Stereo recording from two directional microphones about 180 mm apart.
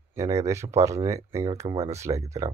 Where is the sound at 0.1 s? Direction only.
15° right (ahead or behind).